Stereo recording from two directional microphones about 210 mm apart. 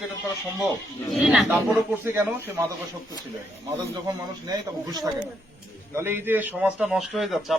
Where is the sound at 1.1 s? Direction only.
5° right (ahead or behind).